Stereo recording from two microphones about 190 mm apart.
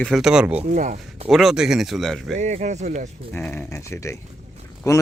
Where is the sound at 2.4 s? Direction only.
35° right (ahead or behind).